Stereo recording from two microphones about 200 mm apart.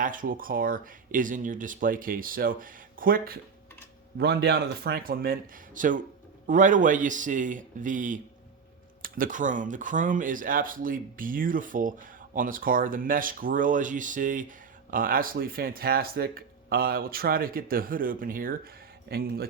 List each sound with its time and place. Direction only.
0.0 s a man's voice: 40° right (ahead or behind)